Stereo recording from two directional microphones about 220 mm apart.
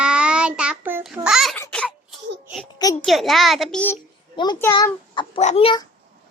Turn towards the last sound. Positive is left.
turn(degrees=25)  # may be behind; listen again after turning